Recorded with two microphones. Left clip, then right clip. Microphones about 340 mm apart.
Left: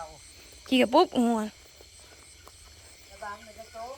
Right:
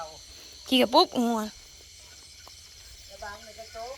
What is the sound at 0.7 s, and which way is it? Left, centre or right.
Speech, centre.